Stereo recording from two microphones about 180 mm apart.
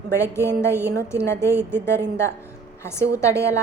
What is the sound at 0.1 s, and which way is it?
A woman's voice, 15° left (ahead or behind).